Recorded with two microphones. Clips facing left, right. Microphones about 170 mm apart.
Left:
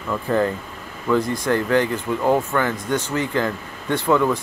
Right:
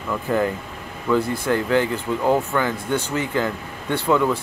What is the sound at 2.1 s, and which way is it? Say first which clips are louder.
Speech: even; 15° left (ahead or behind).